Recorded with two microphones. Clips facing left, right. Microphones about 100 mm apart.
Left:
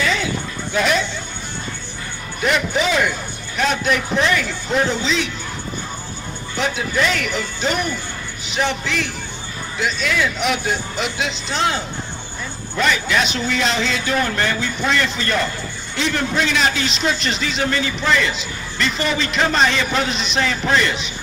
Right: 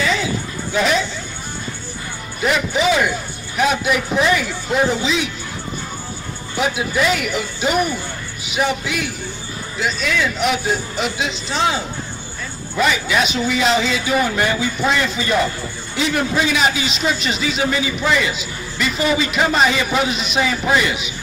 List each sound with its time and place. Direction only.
0.0 s a sound: centre (ahead or behind)
0.7 s a man's voice: centre (ahead or behind)
2.4 s a man's voice: centre (ahead or behind)
6.5 s a man's voice: 5° right (ahead or behind)